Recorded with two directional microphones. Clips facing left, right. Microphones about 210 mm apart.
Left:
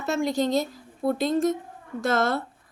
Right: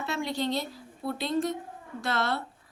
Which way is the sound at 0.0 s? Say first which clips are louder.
Left 6 dB; 45° left (ahead or behind).